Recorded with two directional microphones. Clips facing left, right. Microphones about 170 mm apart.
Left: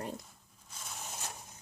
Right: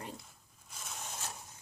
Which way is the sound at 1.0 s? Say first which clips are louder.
Even; 15° left (ahead or behind).